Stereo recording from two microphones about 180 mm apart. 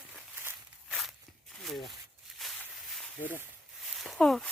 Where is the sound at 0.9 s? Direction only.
Centre (ahead or behind).